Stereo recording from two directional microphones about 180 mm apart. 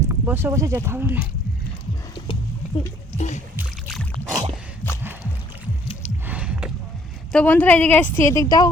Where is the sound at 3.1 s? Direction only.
40° left (ahead or behind).